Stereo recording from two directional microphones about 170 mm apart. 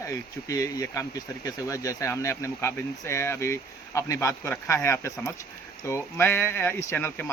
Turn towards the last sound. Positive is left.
turn(degrees=15)  # may be behind; listen again after turning